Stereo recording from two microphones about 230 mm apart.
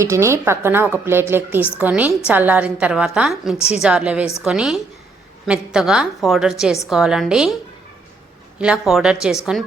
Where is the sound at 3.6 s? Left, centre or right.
Left.